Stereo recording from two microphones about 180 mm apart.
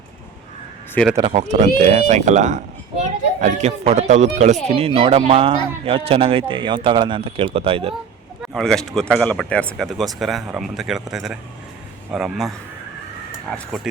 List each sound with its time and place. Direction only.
1.0 s speech: 10° left (ahead or behind)
1.3 s a child's voice: 40° right (ahead or behind)
8.4 s speech: centre (ahead or behind)